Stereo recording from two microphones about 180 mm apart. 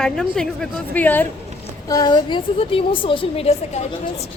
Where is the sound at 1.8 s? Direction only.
20° left (ahead or behind).